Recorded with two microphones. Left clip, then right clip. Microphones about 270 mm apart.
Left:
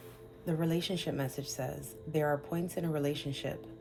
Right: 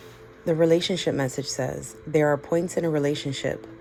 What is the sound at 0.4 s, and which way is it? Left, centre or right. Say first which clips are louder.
Speech: right 14 dB; right.